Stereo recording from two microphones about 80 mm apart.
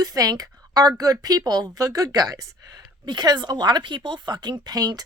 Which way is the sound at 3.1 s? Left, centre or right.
Right.